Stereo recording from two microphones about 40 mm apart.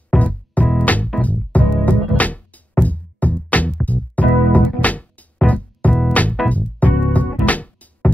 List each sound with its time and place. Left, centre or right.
0.1 s music: left